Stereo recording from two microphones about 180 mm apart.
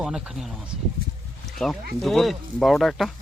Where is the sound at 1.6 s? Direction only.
5° left (ahead or behind).